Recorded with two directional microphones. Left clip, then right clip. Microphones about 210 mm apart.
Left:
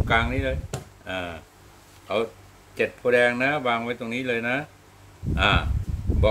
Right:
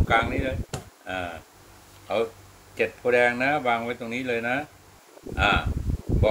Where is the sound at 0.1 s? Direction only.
40° left (ahead or behind).